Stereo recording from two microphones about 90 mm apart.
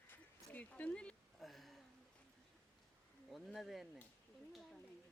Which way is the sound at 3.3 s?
Centre (ahead or behind).